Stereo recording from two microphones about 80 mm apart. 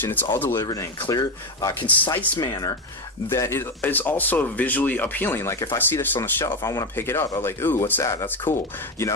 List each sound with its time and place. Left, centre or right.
0.0 s speech: left
1.0 s speech: left
1.8 s speech: left
2.3 s speech: left
3.3 s speech: left
6.4 s speech: left
8.0 s speech: left